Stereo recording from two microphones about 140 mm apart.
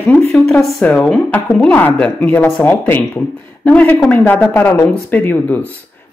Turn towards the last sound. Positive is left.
turn(degrees=15)  # may be behind; listen again after turning